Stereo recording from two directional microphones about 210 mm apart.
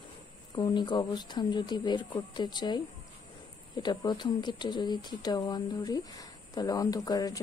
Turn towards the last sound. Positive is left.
turn(degrees=20)  # may be behind; listen again after turning